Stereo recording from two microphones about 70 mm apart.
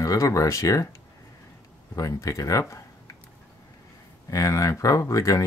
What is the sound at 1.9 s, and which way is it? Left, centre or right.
Speech, left.